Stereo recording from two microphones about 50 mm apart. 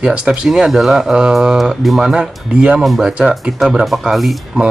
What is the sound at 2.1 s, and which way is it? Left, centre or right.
Speech, centre.